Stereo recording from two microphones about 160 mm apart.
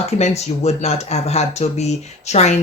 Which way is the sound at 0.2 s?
40° left (ahead or behind).